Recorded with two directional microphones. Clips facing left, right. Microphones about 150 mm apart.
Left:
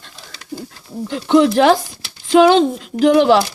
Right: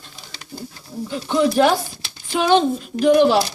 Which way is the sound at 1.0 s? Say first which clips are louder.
Left 6 dB; 85° left.